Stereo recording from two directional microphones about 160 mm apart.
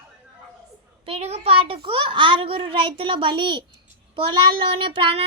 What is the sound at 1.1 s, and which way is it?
A child's voice, 40° right (ahead or behind).